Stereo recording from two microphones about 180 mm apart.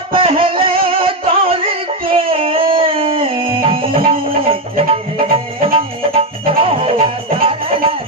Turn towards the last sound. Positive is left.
turn(degrees=-30)  # may be behind; listen again after turning